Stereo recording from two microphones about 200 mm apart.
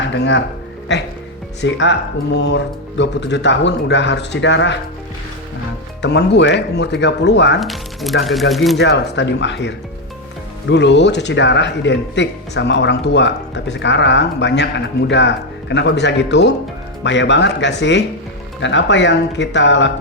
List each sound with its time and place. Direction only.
0.9 s speech: 60° left (ahead or behind)
6.0 s speech: 60° left (ahead or behind)
7.6 s speech: centre (ahead or behind)
8.8 s speech: 60° left (ahead or behind)